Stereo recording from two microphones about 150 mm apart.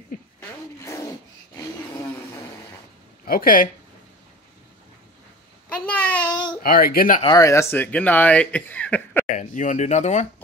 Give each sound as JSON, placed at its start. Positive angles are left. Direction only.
{"t": 0.8, "sound": "a sound", "side_deg": 20}
{"t": 3.3, "sound": "speech", "side_deg": 75}
{"t": 5.9, "sound": "a sound", "side_deg": 10}
{"t": 6.6, "sound": "speech", "side_deg": 75}
{"t": 7.2, "sound": "speech", "side_deg": 25}
{"t": 9.3, "sound": "speech", "side_deg": 55}